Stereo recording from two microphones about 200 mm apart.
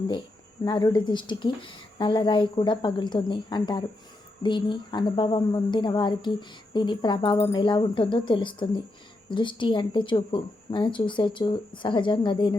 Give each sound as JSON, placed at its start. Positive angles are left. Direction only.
{"t": 0.6, "sound": "a woman's voice", "side_deg": 20}